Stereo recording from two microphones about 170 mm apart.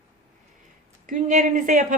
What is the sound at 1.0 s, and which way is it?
Speech, 50° right (ahead or behind).